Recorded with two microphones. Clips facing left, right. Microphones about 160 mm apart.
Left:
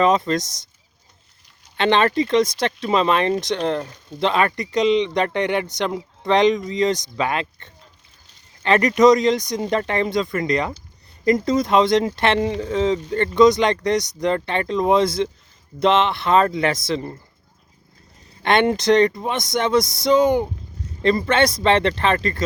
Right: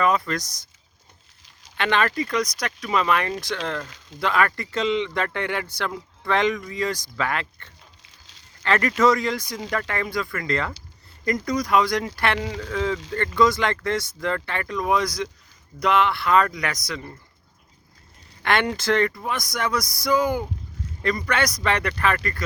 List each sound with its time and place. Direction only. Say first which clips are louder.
0.0 s speech: left 5 dB; 20° left (ahead or behind)
1.7 s speech: left 5 dB; 25° left (ahead or behind)
8.0 s a sound: right 1 dB; 90° right
8.6 s speech: left 5 dB; 20° left (ahead or behind)
18.4 s speech: left 6 dB; 25° left (ahead or behind)